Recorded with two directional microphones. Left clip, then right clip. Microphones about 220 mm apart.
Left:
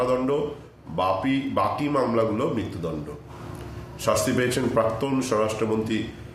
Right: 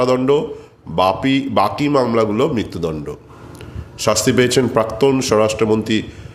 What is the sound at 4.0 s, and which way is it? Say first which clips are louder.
Speech: right 8 dB; 45° right (ahead or behind).